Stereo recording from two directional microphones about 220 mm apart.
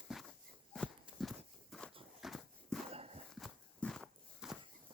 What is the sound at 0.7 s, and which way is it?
Walk, centre (ahead or behind).